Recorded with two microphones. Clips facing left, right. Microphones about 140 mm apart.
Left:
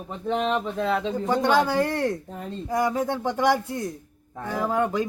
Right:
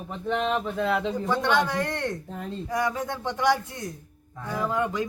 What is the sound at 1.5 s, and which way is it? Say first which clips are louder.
Speech: left 4 dB; 35° left (ahead or behind).